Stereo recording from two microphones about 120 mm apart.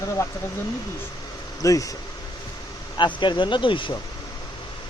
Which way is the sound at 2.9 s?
40° left (ahead or behind).